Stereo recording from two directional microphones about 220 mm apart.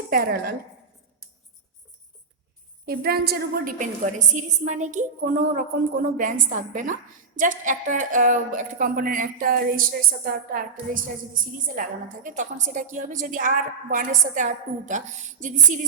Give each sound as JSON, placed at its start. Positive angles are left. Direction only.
{"t": 0.1, "sound": "a woman's voice", "side_deg": -45}
{"t": 2.8, "sound": "a woman's voice", "side_deg": -45}